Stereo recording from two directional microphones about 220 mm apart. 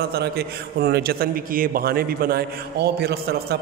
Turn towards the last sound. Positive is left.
turn(degrees=-45)  # may be behind; listen again after turning